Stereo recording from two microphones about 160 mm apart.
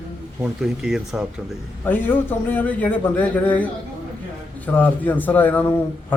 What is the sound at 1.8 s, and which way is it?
Speech, 10° left (ahead or behind).